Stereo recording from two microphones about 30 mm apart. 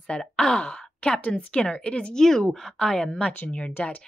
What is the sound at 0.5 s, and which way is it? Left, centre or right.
Speech, left.